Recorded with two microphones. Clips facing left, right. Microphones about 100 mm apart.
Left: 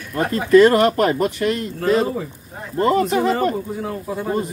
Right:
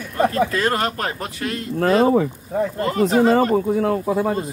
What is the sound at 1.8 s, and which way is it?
Speech, 60° right (ahead or behind).